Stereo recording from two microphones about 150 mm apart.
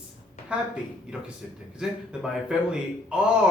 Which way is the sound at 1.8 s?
5° right (ahead or behind).